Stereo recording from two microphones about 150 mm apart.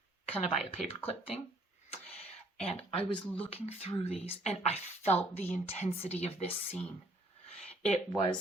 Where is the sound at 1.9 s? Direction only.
40° left (ahead or behind).